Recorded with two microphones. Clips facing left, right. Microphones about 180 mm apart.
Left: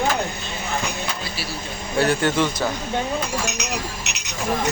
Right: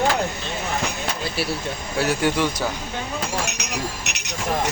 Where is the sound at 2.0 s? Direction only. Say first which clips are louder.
Left 2 dB; 10° right (ahead or behind).